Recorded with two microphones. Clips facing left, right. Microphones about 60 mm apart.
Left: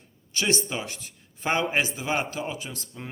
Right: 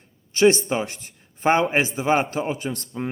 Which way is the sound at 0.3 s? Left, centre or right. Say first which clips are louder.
Right 10 dB; right.